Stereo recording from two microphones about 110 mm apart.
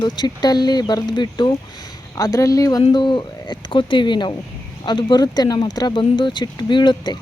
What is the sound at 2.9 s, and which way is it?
Speech, 45° left (ahead or behind).